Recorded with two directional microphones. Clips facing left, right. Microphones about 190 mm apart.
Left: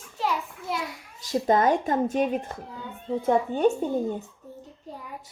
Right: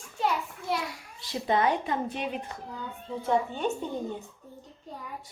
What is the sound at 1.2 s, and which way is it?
A woman's voice, 45° left (ahead or behind).